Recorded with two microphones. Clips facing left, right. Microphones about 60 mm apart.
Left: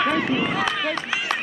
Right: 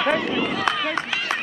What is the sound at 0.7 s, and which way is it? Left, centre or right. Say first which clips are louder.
Speech: right 3 dB; right.